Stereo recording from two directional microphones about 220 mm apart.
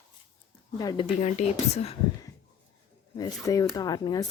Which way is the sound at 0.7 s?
20° left (ahead or behind).